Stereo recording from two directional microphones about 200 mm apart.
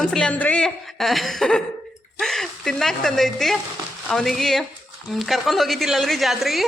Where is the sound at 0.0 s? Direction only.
5° left (ahead or behind).